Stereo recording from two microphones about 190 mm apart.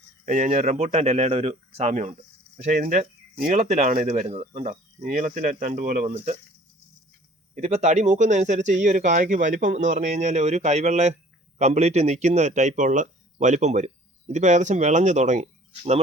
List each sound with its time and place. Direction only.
0.3 s speech: 40° right (ahead or behind)
7.5 s speech: 40° right (ahead or behind)